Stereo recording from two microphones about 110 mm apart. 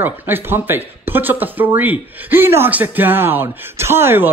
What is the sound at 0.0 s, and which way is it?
Speech, 20° right (ahead or behind).